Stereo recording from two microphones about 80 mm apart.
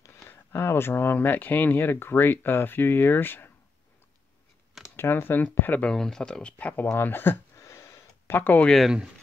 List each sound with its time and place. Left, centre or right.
0.0 s a sound: left
0.3 s speech: left
4.9 s speech: left
5.9 s speech: centre; by 8.4 s left
8.4 s speech: left
8.6 s speech: centre